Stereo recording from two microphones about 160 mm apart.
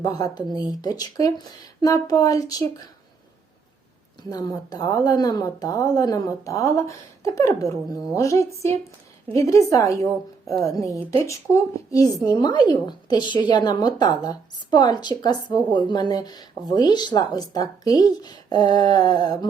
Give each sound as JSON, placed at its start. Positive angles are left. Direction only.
{"t": 0.0, "sound": "a woman's voice", "side_deg": 25}
{"t": 4.2, "sound": "a woman's voice", "side_deg": 25}